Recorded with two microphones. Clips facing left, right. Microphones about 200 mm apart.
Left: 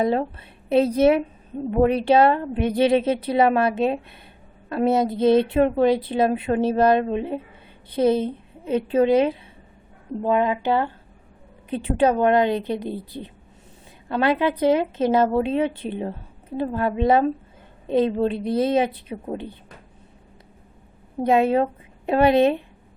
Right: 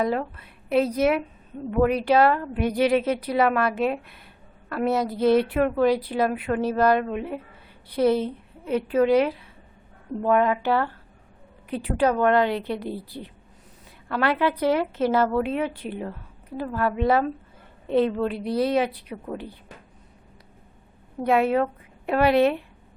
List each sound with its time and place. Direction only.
0.0 s a woman's voice: 25° left (ahead or behind)
21.2 s a woman's voice: 20° left (ahead or behind)